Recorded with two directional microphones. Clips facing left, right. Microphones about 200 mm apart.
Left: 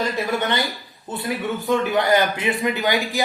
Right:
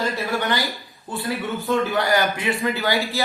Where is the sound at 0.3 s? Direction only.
25° left (ahead or behind).